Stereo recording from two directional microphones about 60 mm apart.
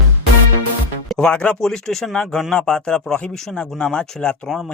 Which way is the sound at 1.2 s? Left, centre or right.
Centre.